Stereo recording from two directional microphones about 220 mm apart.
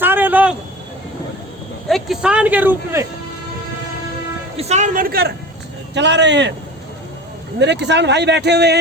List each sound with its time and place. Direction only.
0.0 s a sound: 10° right (ahead or behind)
1.9 s speech: 5° right (ahead or behind)
4.5 s a man's voice: 30° right (ahead or behind); by 6.5 s 55° right (ahead or behind)
7.6 s speech: 50° right (ahead or behind)